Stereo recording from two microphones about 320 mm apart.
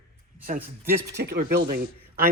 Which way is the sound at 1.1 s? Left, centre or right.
Right.